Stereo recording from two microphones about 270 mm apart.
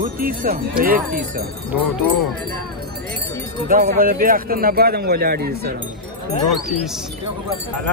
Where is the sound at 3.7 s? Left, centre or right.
Right.